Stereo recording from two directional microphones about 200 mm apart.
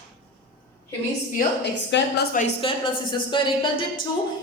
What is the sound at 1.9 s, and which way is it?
Speech, 60° left (ahead or behind).